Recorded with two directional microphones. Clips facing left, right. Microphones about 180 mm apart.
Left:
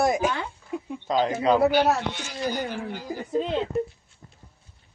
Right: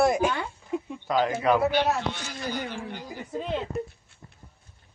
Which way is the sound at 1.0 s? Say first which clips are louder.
Left 2 dB; 25° left (ahead or behind).